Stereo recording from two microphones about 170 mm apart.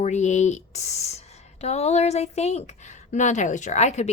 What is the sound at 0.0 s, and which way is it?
A woman's voice, 45° left (ahead or behind).